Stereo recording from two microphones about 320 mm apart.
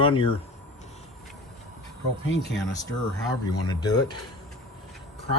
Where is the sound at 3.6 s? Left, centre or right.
Centre.